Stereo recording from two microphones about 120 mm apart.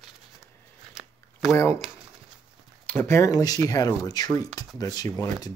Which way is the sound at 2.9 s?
20° left (ahead or behind).